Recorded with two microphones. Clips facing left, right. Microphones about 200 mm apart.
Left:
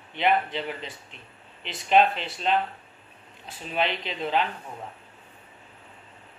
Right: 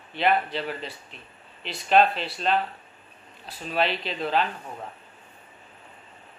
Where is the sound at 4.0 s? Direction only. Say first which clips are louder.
Right 1 dB; 20° left (ahead or behind).